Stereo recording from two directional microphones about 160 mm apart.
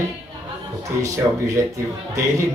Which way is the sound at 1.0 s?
20° right (ahead or behind).